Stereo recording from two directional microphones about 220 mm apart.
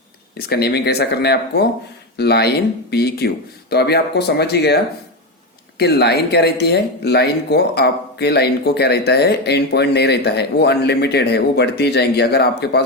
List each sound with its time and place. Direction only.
0.3 s speech: 45° left (ahead or behind)